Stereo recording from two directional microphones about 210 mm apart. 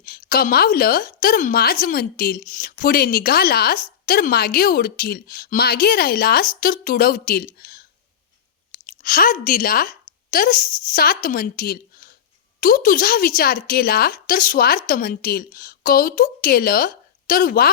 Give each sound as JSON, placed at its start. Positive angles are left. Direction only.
{"t": 0.0, "sound": "a woman's voice", "side_deg": 45}
{"t": 8.9, "sound": "a woman's voice", "side_deg": 40}